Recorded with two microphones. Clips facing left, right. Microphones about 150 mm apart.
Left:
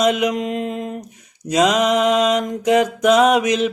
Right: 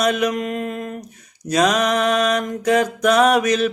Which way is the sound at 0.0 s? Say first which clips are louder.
Left 2 dB; 20° left (ahead or behind).